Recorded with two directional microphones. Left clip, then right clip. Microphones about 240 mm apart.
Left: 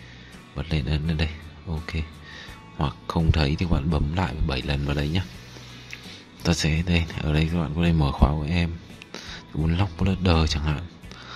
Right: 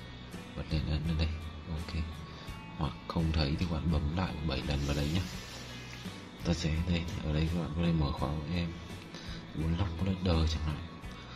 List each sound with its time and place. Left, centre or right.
0.7 s speech: left
2.8 s speech: left
6.4 s speech: left
9.7 s speech: left